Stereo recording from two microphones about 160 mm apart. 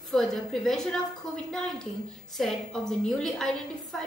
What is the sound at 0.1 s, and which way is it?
A woman's voice, centre (ahead or behind).